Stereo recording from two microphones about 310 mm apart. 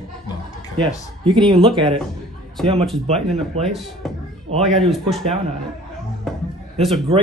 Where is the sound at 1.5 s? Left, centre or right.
Centre.